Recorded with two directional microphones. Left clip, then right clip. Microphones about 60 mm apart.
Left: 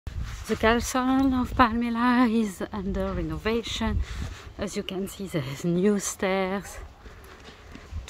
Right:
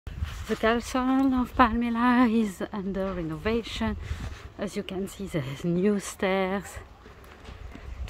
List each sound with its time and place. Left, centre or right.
0.6 s speech: left
1.3 s a woman's voice: centre; by 6.0 s left
6.1 s speech: centre